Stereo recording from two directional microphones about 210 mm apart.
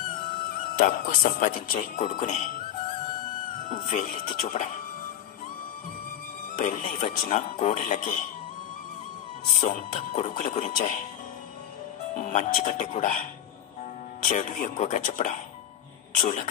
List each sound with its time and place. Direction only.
0.7 s speech: 40° left (ahead or behind)
3.6 s speech: 40° left (ahead or behind)
6.6 s speech: 35° left (ahead or behind)
9.5 s speech: 35° left (ahead or behind)
12.2 s speech: 35° left (ahead or behind)